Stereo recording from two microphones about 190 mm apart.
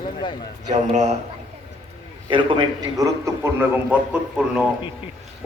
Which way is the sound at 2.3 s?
25° right (ahead or behind).